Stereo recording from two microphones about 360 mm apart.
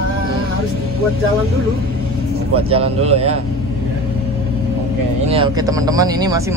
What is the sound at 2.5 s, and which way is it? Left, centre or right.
Speech, centre.